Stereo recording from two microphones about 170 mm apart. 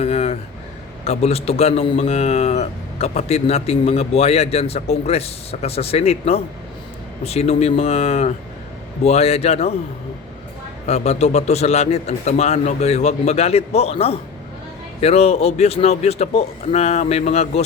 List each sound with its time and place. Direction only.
0.0 s a sound: 35° left (ahead or behind)
1.0 s a man's voice: 35° left (ahead or behind)
10.8 s a man's voice: 40° left (ahead or behind)